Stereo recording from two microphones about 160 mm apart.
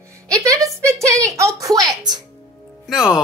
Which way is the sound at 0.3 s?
20° right (ahead or behind).